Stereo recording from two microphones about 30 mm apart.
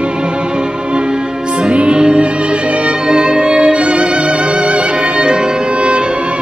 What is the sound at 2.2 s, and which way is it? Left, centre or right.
Music, right.